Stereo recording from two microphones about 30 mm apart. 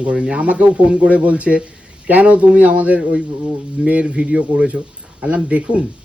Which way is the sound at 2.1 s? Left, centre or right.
Right.